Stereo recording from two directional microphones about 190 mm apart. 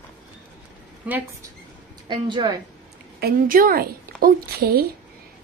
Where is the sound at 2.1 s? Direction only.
25° right (ahead or behind).